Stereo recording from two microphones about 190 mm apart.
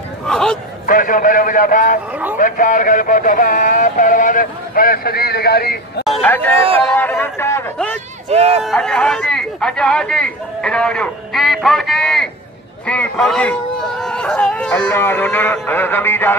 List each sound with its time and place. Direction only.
0.3 s a sound: 5° left (ahead or behind)
0.8 s a man's voice: 45° left (ahead or behind)
6.2 s speech: 10° left (ahead or behind)
6.8 s a sound: 5° left (ahead or behind)
8.3 s speech: 30° right (ahead or behind)
8.6 s speech: 5° left (ahead or behind)
14.0 s music: 5° left (ahead or behind)